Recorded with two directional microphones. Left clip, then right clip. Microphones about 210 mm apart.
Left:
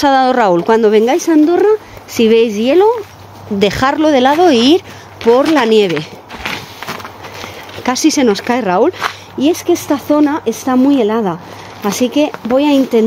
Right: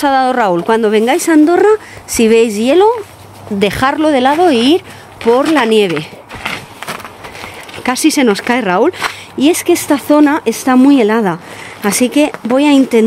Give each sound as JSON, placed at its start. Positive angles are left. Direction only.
{"t": 0.0, "sound": "a woman's voice", "side_deg": 5}
{"t": 7.8, "sound": "a woman's voice", "side_deg": -5}
{"t": 9.4, "sound": "a woman's voice", "side_deg": -20}